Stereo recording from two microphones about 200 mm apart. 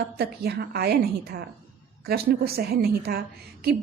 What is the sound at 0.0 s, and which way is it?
A woman's voice, 55° right (ahead or behind).